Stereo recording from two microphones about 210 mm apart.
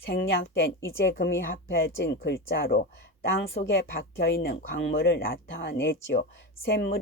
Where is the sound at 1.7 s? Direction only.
50° left (ahead or behind).